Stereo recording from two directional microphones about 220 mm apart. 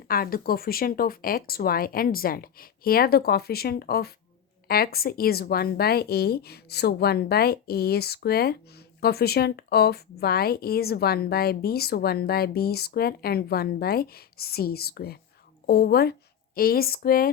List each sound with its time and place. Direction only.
0.1 s a woman's voice: 40° left (ahead or behind)